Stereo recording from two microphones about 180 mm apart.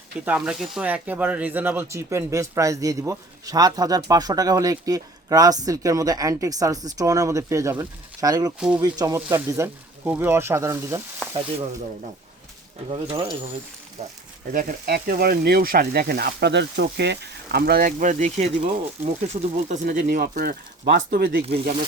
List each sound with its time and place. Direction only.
0.3 s speech: 5° right (ahead or behind)
8.5 s speech: 5° right (ahead or behind)
8.8 s speech: 20° right (ahead or behind)
11.2 s sizzle: 10° left (ahead or behind)
12.9 s speech: 30° right (ahead or behind)
14.5 s speech: 50° right (ahead or behind)